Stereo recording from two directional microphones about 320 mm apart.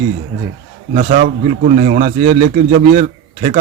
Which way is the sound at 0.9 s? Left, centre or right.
Right.